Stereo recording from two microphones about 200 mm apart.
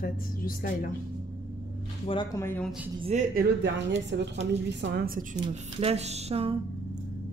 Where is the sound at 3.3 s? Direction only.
60° right (ahead or behind).